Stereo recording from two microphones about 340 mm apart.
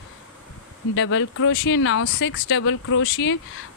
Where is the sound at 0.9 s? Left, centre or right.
Left.